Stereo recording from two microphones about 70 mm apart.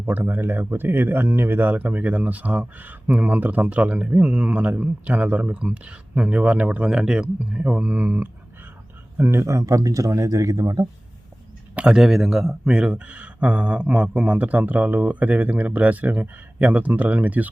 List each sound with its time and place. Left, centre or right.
0.0 s speech: right
9.6 s speech: right
11.7 s speech: centre